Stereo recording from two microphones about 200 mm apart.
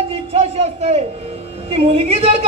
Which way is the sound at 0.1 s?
30° right (ahead or behind).